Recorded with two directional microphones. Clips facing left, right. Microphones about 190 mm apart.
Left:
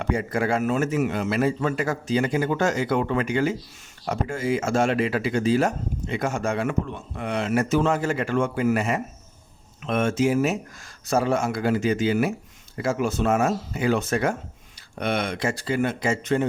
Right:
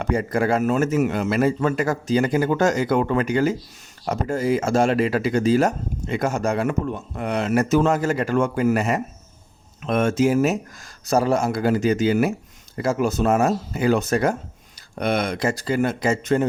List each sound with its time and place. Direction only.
0.0 s a man's voice: 40° right (ahead or behind)